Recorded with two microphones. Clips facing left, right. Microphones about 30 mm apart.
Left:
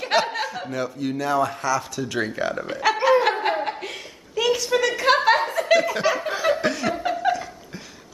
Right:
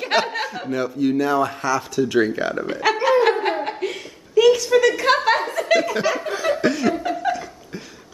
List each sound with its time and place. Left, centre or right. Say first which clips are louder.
0.0 s speech: right 1 dB; centre
2.0 s a sound: right 7 dB; centre
7.0 s laughter: even; centre